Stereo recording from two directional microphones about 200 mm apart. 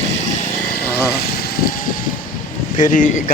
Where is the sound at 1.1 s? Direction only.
50° left (ahead or behind).